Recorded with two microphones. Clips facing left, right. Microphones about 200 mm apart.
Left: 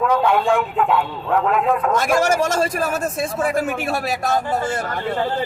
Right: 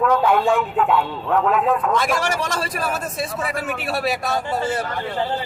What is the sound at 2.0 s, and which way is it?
A man's voice, 45° left (ahead or behind).